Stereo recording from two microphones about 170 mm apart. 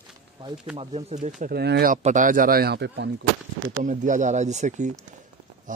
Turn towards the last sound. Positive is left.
turn(degrees=-45)  # may be behind; listen again after turning